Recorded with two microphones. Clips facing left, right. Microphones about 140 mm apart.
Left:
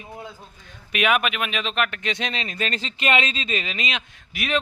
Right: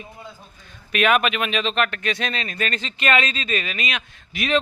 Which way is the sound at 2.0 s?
20° left (ahead or behind).